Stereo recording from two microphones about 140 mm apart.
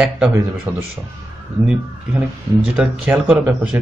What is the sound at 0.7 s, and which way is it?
Speech, 10° right (ahead or behind).